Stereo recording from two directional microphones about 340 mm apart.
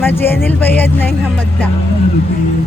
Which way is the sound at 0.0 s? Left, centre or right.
Centre.